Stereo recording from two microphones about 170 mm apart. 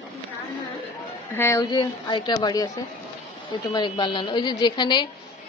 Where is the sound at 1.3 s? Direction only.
15° left (ahead or behind).